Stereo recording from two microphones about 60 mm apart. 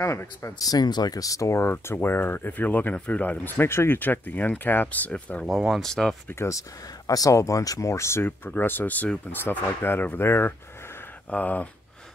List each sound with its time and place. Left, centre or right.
0.0 s speech: left
0.7 s speech: left
5.7 s speech: centre
6.2 s speech: left
7.1 s speech: left
8.3 s speech: left
11.2 s speech: left